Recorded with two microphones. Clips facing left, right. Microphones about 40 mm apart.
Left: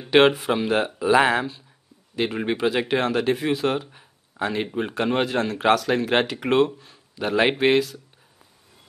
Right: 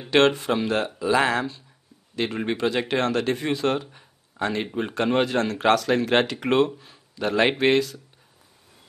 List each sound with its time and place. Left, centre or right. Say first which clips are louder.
0.1 s speech: left 2 dB; centre